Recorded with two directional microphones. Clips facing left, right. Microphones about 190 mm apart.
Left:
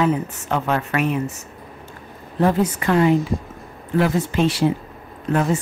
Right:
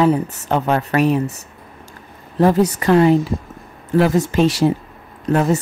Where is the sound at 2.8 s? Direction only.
35° right (ahead or behind).